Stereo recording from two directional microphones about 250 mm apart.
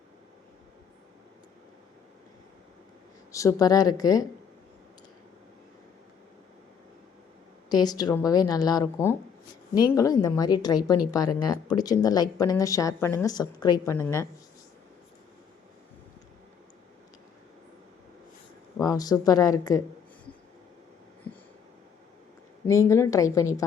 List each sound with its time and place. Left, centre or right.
3.3 s speech: centre
7.7 s speech: centre
18.8 s speech: centre
22.6 s speech: centre